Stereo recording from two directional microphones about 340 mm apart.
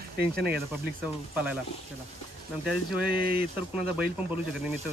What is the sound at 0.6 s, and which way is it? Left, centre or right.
Speech, centre.